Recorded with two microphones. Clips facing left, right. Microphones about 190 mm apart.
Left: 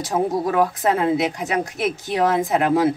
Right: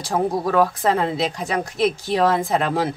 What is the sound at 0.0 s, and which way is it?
Speech, 20° left (ahead or behind).